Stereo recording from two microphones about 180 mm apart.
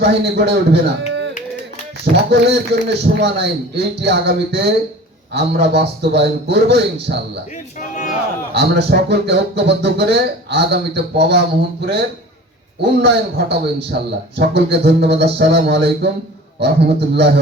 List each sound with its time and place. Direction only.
0.0 s a man's voice: 65° right (ahead or behind)
7.8 s a sound: 45° left (ahead or behind)
8.5 s a man's voice: 65° right (ahead or behind)
12.8 s a man's voice: 65° right (ahead or behind)